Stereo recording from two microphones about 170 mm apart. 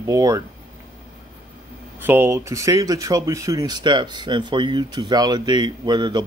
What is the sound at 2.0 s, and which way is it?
Speech, 10° right (ahead or behind).